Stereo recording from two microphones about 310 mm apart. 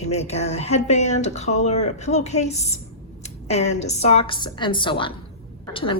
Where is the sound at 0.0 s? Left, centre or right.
Left.